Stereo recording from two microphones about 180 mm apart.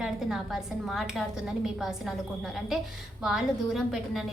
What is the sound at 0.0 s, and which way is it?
A woman's voice, 5° right (ahead or behind).